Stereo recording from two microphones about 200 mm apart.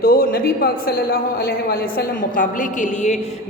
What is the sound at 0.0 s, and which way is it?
A man's voice, 50° left (ahead or behind).